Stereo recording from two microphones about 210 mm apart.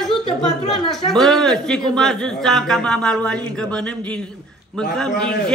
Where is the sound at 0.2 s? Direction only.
25° left (ahead or behind).